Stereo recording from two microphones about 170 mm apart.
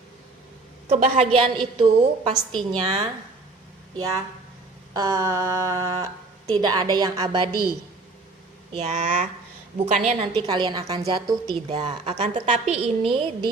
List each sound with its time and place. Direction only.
0.9 s a woman's voice: 45° right (ahead or behind)
2.3 s a woman's voice: 5° left (ahead or behind)
2.7 s a woman's voice: 25° right (ahead or behind)
4.9 s a sound: 15° right (ahead or behind)
6.6 s a woman's voice: 25° right (ahead or behind)
8.7 s speech: 40° right (ahead or behind)
10.2 s a woman's voice: 30° right (ahead or behind)